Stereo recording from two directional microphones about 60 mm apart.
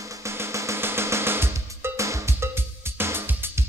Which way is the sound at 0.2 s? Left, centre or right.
Right.